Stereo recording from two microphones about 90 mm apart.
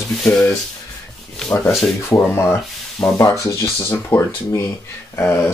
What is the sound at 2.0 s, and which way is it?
Speech, 25° left (ahead or behind).